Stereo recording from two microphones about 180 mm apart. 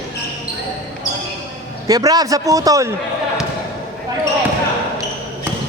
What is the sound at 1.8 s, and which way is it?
A man's voice, 20° right (ahead or behind).